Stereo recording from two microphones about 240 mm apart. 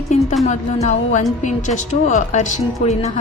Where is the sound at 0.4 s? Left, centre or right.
Left.